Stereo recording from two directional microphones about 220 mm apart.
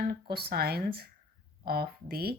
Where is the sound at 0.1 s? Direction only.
45° right (ahead or behind).